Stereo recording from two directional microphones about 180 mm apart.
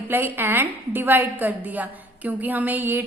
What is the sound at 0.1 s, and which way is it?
A woman's voice, 10° right (ahead or behind).